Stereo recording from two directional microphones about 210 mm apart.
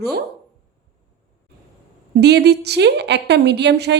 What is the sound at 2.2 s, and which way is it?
A woman's voice, 50° right (ahead or behind).